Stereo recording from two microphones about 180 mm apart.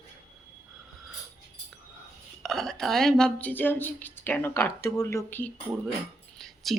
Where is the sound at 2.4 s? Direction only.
Centre (ahead or behind).